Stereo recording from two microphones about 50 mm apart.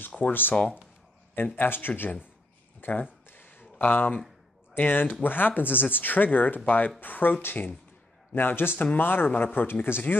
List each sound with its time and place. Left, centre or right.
0.2 s speech: left
2.8 s a sound: left
4.7 s speech: left
9.8 s speech: left